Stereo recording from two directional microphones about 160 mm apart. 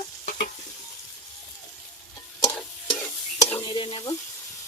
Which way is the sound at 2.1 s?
20° left (ahead or behind).